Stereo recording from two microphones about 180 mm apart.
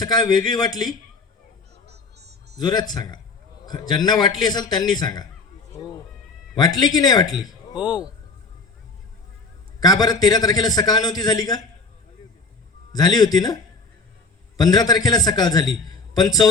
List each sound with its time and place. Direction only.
0.0 s a man's voice: 20° left (ahead or behind)
1.9 s music: 65° right (ahead or behind)
2.6 s a man's voice: 20° left (ahead or behind)
6.6 s a man's voice: 20° left (ahead or behind)
7.8 s speech: 5° right (ahead or behind)
9.8 s a man's voice: 20° left (ahead or behind)
12.9 s a man's voice: 20° left (ahead or behind)
14.6 s a man's voice: 20° left (ahead or behind)